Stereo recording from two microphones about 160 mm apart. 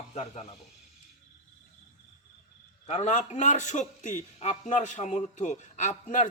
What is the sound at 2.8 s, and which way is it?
A man's voice, 45° left (ahead or behind).